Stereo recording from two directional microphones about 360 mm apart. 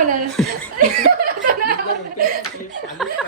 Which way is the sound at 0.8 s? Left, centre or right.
Right.